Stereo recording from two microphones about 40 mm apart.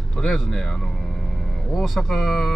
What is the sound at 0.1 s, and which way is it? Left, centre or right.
Speech, centre.